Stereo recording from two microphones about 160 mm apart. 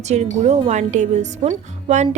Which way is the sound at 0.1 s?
45° right (ahead or behind).